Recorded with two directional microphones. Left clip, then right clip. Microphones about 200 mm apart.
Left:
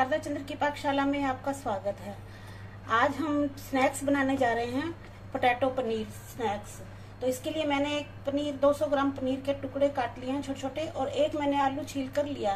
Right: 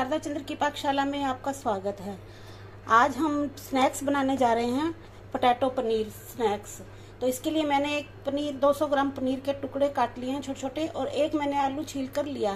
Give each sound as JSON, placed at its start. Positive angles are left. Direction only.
{"t": 0.1, "sound": "a woman's voice", "side_deg": -30}
{"t": 2.9, "sound": "a woman's voice", "side_deg": -30}